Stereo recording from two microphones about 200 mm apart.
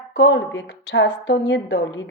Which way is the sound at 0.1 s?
65° left (ahead or behind).